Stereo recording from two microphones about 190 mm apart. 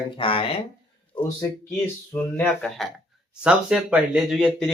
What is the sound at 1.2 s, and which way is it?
Speech, 15° left (ahead or behind).